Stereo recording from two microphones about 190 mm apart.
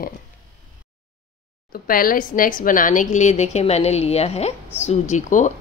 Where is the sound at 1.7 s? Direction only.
50° left (ahead or behind).